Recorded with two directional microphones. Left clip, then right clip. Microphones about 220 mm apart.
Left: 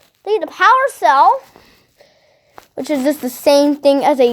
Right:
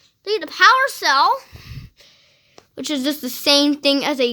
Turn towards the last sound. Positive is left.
turn(degrees=-10)  # may be behind; listen again after turning